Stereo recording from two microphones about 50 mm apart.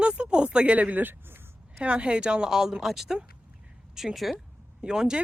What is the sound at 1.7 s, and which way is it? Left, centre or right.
Speech, right.